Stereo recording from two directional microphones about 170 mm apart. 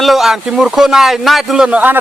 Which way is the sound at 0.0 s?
Centre (ahead or behind).